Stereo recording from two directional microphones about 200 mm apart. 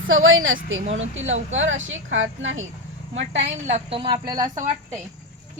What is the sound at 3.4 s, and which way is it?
A woman's voice, 35° right (ahead or behind).